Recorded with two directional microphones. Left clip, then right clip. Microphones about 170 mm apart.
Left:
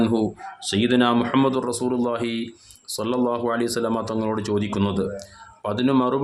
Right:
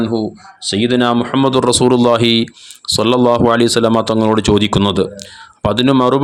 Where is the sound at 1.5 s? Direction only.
55° right (ahead or behind).